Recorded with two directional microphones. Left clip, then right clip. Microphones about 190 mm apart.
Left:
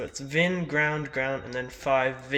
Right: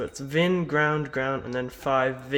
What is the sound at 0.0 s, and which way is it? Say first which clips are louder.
Speech: right 1 dB; 35° right (ahead or behind).